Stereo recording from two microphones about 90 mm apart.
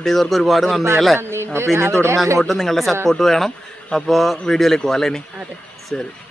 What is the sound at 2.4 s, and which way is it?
Speech, centre (ahead or behind).